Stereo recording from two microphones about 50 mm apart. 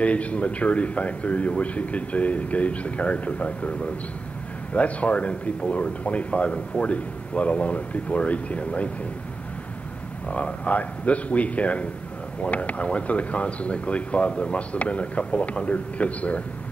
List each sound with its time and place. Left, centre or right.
0.0 s speech: left
4.7 s speech: left
10.2 s speech: left